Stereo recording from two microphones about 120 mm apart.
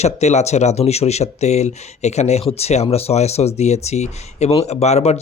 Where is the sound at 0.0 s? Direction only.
70° left (ahead or behind).